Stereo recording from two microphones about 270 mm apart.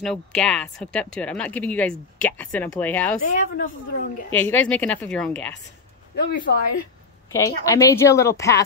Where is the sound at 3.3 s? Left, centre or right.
Left.